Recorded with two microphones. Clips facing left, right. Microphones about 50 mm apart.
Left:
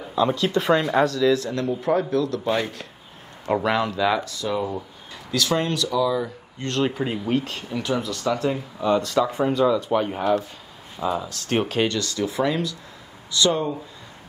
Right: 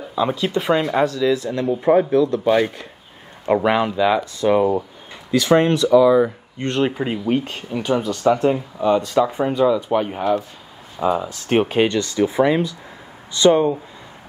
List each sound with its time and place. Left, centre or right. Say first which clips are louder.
0.1 s speech: right 1 dB; centre
4.4 s speech: right 9 dB; right
8.7 s speech: even; centre
11.0 s speech: right 5 dB; right